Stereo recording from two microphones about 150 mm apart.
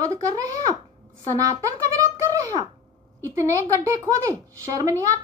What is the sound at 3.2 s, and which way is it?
Speech, 20° right (ahead or behind).